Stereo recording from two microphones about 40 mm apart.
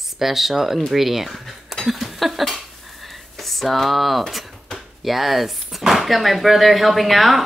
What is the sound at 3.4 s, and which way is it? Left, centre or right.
Speech, centre.